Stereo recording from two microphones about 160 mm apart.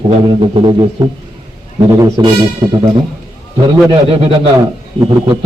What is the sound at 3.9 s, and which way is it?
Speech, 35° right (ahead or behind).